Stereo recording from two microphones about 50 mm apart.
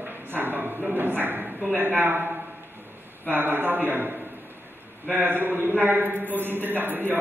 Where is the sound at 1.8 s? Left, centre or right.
Right.